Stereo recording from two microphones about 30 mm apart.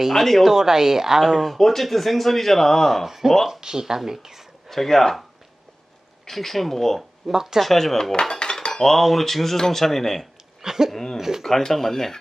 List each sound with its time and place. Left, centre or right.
0.1 s speech: centre
0.4 s speech: centre
1.2 s speech: centre
3.6 s speech: right
4.7 s dishes: centre
6.2 s dishes: centre
7.3 s speech: centre
7.6 s speech: centre
8.2 s dishes: left
8.7 s dishes: centre
10.6 s a sound: centre
10.9 s dishes: centre
11.2 s speech: centre
11.4 s dishes: centre